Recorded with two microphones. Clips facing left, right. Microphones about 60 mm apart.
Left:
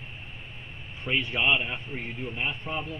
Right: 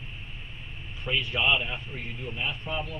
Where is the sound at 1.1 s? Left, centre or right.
Left.